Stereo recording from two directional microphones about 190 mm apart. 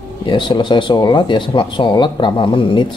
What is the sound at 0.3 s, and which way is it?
Speech, 25° left (ahead or behind).